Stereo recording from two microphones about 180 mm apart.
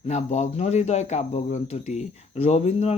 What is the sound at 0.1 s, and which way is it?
Speech, 40° left (ahead or behind).